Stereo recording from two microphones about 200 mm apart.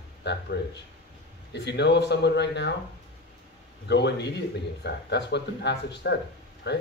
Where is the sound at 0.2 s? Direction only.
60° left (ahead or behind).